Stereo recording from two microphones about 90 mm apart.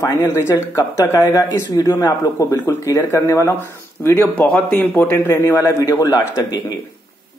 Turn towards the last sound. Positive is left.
turn(degrees=45)  # may be behind; listen again after turning